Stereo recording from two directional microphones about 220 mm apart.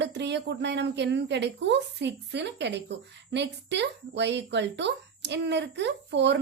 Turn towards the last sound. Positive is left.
turn(degrees=-55)  # may be behind; listen again after turning